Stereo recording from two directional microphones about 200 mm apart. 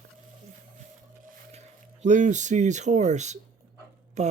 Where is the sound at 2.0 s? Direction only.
40° right (ahead or behind).